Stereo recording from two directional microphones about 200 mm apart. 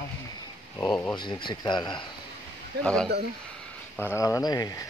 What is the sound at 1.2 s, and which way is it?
Speech, 25° left (ahead or behind).